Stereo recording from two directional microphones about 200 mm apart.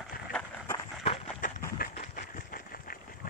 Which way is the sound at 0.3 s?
5° left (ahead or behind).